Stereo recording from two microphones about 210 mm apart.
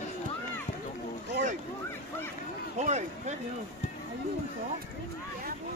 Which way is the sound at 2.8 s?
30° right (ahead or behind).